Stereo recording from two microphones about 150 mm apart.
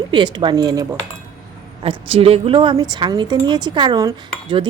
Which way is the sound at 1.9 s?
40° right (ahead or behind).